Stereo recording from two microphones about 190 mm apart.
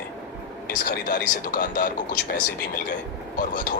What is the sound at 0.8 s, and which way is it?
Speech, 45° left (ahead or behind).